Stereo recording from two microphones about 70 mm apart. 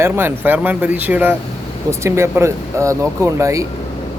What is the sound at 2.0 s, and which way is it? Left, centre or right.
Speech, right.